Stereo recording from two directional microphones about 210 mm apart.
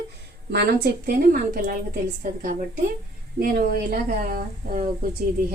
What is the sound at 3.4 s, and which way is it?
Speech, 45° right (ahead or behind).